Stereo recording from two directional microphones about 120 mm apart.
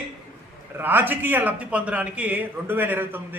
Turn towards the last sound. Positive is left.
turn(degrees=-15)  # may be behind; listen again after turning